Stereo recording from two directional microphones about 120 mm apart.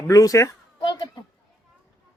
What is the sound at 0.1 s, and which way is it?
Speech, 30° left (ahead or behind).